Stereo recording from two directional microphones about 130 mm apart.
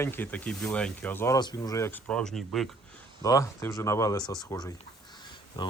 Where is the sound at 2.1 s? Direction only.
5° left (ahead or behind).